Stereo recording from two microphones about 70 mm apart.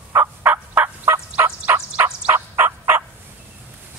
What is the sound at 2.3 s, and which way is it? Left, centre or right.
Fowl, right.